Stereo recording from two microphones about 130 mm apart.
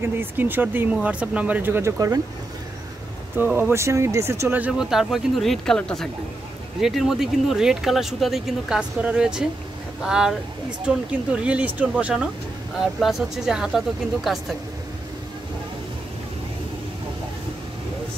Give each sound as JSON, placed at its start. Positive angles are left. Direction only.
{"t": 0.0, "sound": "speech", "side_deg": -15}
{"t": 3.3, "sound": "speech", "side_deg": -15}